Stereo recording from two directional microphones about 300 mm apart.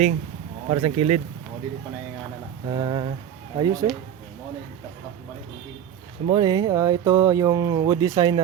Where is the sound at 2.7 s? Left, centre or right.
Centre.